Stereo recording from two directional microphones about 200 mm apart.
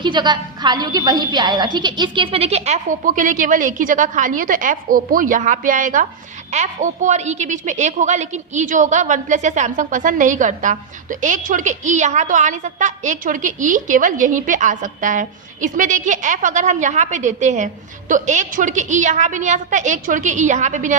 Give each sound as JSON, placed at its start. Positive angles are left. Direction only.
{"t": 0.0, "sound": "a woman's voice", "side_deg": -20}